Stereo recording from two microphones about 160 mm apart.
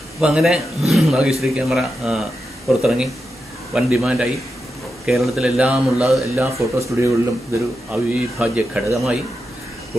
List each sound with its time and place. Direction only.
0.2 s speech: 5° right (ahead or behind)
6.3 s speech: 15° right (ahead or behind)
7.9 s speech: 10° right (ahead or behind)